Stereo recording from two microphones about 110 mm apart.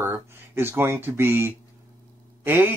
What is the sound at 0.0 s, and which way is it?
Speech, 20° right (ahead or behind).